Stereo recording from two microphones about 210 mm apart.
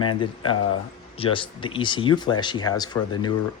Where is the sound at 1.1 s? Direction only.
25° left (ahead or behind).